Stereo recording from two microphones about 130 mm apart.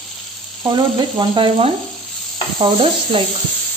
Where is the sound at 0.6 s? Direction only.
35° right (ahead or behind).